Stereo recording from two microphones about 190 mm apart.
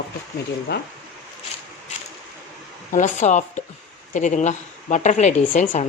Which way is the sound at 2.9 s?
40° left (ahead or behind).